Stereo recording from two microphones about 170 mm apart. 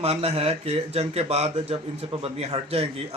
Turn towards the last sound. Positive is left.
turn(degrees=-35)  # may be behind; listen again after turning